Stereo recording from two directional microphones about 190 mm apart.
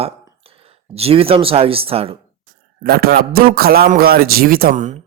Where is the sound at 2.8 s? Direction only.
50° right (ahead or behind).